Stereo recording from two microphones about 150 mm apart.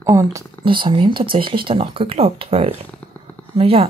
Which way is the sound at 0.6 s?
35° right (ahead or behind).